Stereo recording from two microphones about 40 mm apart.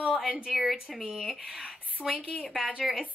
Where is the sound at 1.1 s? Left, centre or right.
Centre.